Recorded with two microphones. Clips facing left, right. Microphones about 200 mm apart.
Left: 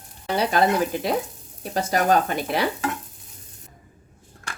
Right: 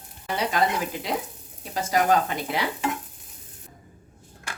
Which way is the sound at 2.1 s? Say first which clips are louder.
Left 2 dB; 60° left (ahead or behind).